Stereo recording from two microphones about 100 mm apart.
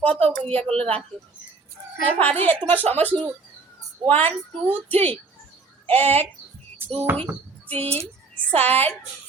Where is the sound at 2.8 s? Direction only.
90° right.